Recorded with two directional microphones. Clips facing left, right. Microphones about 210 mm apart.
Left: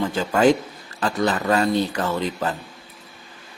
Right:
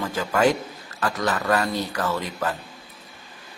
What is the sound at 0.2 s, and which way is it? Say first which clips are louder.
A man's voice: left 3 dB; 25° left (ahead or behind).